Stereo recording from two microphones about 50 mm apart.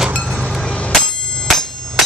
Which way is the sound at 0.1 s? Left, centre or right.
Centre.